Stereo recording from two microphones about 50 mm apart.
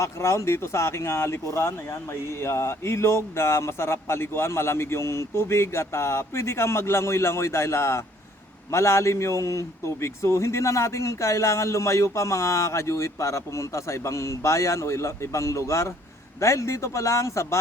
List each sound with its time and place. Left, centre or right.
0.0 s a man's voice: left